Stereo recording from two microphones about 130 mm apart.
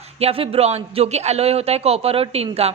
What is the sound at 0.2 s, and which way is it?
A woman's voice, 50° right (ahead or behind).